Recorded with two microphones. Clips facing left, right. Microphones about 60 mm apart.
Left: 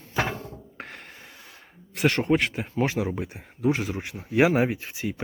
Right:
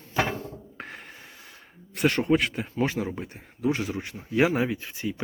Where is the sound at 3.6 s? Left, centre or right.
Left.